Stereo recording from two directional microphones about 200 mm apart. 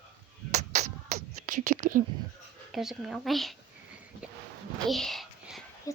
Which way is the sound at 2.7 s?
Centre (ahead or behind).